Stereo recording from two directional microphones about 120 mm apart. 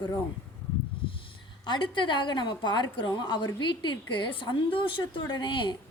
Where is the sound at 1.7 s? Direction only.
40° left (ahead or behind).